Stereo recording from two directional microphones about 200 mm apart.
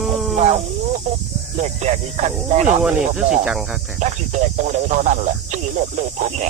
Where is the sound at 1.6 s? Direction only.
35° right (ahead or behind).